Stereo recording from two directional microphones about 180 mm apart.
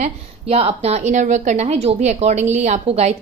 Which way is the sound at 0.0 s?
35° right (ahead or behind).